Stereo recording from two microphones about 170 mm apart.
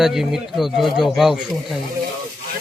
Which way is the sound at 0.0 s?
Centre (ahead or behind).